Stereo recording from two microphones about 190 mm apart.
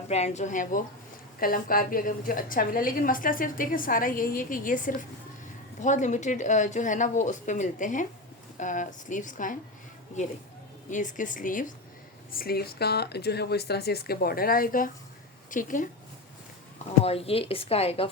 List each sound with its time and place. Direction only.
0.1 s a woman's voice: 35° left (ahead or behind)
10.8 s a woman's voice: 40° left (ahead or behind)
17.0 s speech: 30° left (ahead or behind)